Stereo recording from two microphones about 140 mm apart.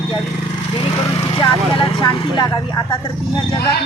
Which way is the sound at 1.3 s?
40° left (ahead or behind).